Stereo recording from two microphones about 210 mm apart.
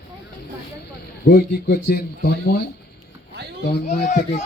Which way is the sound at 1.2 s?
50° left (ahead or behind).